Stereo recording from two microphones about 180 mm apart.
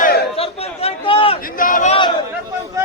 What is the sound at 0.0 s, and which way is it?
Chatter, 60° left (ahead or behind).